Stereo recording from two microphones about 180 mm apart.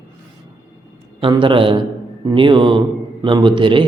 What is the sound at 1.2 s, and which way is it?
Speech, 25° right (ahead or behind).